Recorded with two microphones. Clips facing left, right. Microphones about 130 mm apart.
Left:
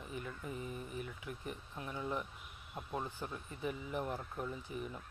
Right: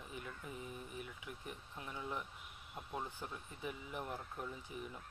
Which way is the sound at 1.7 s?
35° left (ahead or behind).